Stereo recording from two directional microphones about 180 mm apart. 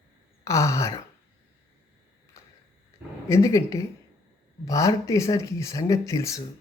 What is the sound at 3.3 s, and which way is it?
Speech, 15° left (ahead or behind).